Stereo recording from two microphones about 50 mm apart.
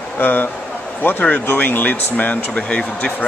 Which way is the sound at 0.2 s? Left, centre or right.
Left.